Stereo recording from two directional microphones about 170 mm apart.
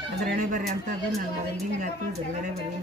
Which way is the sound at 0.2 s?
55° right (ahead or behind).